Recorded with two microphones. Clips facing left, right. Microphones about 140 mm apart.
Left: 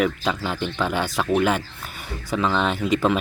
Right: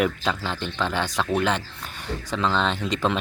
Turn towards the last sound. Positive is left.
turn(degrees=5)  # may be behind; listen again after turning